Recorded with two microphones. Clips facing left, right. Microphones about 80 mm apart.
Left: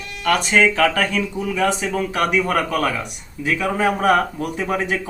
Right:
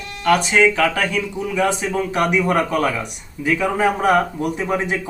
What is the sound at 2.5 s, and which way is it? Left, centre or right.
Speech, centre.